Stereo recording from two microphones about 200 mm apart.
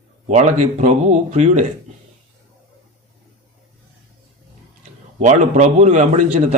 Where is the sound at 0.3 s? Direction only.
35° right (ahead or behind).